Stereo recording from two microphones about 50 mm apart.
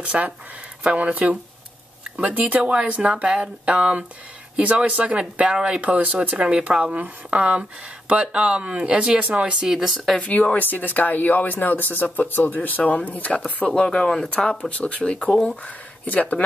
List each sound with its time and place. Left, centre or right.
0.0 s speech: right
9.7 s speech: centre
10.1 s speech: left
13.7 s speech: centre
16.1 s speech: left